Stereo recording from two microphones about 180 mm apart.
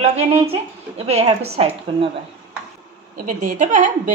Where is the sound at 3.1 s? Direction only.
45° right (ahead or behind).